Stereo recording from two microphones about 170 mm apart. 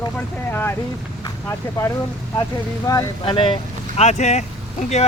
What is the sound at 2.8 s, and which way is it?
Speech, 20° left (ahead or behind).